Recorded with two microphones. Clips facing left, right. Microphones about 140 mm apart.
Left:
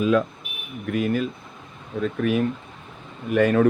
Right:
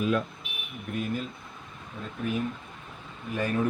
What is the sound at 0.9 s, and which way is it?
Speech, 90° left.